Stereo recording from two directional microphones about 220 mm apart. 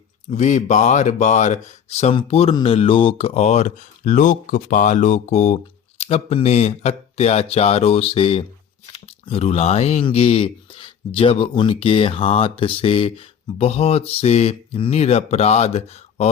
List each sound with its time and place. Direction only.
0.3 s speech: 35° left (ahead or behind)